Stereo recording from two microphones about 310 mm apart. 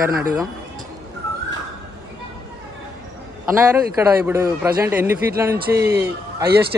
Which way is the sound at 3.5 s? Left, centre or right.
Centre.